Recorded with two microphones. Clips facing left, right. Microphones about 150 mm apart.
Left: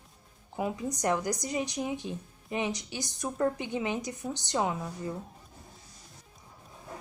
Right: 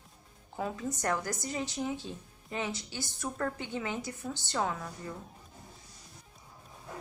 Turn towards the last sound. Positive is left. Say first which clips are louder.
# left 4 dB
turn(degrees=20)  # may be behind; listen again after turning